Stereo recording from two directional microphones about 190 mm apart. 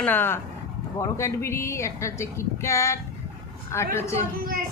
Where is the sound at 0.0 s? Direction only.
10° left (ahead or behind).